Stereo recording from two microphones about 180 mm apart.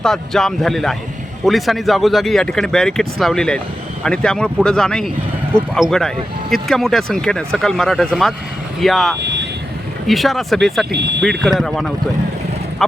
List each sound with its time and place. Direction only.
0.0 s speech: centre (ahead or behind)
9.2 s vehicle: 75° right (ahead or behind)
10.1 s speech: centre (ahead or behind)
10.9 s speech: 70° right (ahead or behind)
11.2 s speech: centre (ahead or behind)